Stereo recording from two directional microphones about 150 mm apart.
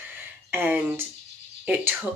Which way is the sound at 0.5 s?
15° right (ahead or behind).